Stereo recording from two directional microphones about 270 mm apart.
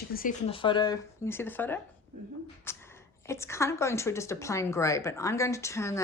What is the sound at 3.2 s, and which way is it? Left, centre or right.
Speech, centre.